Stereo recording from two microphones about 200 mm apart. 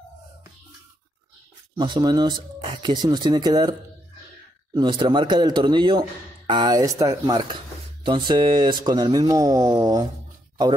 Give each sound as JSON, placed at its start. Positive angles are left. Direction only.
{"t": 1.8, "sound": "speech", "side_deg": -20}
{"t": 4.7, "sound": "speech", "side_deg": -25}